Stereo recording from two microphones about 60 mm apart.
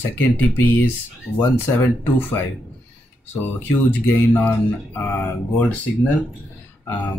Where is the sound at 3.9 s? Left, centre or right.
Left.